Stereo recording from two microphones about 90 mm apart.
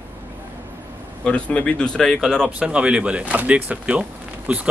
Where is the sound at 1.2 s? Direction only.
10° left (ahead or behind).